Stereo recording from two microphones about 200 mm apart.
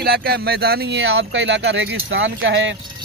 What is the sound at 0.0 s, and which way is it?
Speech, 50° right (ahead or behind).